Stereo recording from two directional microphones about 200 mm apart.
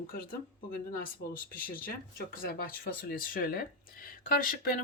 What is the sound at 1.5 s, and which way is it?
Speech, 45° left (ahead or behind).